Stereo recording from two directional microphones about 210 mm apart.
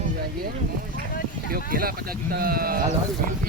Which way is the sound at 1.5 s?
45° right (ahead or behind).